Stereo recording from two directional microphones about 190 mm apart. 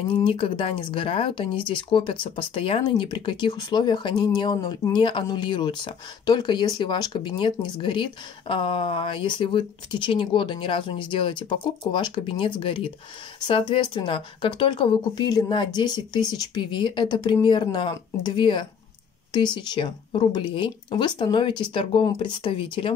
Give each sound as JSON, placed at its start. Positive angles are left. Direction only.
{"t": 0.1, "sound": "speech", "side_deg": 25}